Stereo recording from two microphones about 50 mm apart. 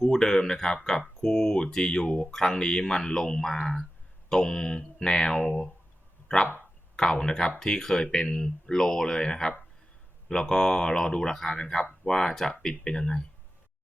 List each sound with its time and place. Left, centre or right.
0.0 s speech: centre